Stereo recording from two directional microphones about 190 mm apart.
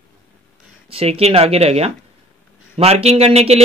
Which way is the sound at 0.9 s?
30° right (ahead or behind).